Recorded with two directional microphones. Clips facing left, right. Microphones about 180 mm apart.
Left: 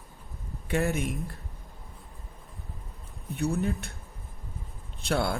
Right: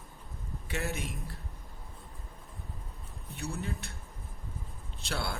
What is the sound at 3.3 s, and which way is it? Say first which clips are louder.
Speech: left 10 dB; 55° left (ahead or behind).